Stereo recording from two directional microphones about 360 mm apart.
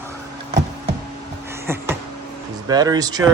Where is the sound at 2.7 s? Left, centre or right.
Centre.